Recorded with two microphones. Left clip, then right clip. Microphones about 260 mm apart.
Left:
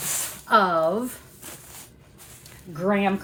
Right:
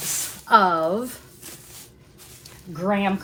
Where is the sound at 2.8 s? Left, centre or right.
Right.